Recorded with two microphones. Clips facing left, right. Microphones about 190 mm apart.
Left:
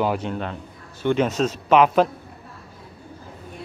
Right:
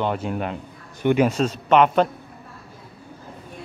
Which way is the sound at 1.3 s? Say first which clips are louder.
Even; centre (ahead or behind).